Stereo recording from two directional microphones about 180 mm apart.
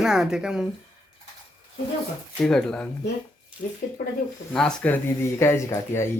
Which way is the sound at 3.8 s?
50° left (ahead or behind).